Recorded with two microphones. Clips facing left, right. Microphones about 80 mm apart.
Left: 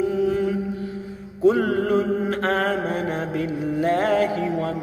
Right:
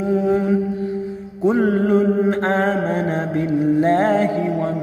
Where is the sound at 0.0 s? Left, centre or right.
Right.